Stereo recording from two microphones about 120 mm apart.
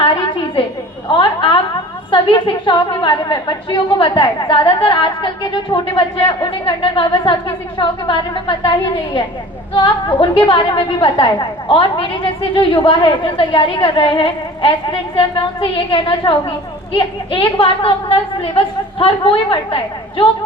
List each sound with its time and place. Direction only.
1.0 s a woman's voice: 40° left (ahead or behind)